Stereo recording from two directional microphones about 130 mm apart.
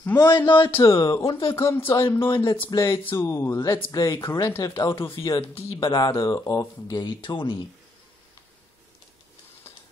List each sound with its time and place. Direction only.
0.2 s speech: 30° left (ahead or behind)
0.7 s speech: 15° left (ahead or behind)
0.9 s speech: 35° left (ahead or behind)
1.6 s speech: 20° left (ahead or behind)
1.9 s speech: 40° left (ahead or behind)
2.6 s speech: 20° left (ahead or behind)
5.5 s speech: 45° left (ahead or behind)